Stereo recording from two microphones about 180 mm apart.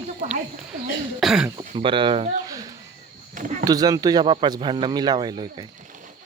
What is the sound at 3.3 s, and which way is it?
Speech, 45° right (ahead or behind).